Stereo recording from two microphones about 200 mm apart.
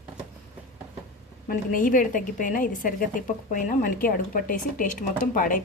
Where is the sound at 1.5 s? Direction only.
40° left (ahead or behind).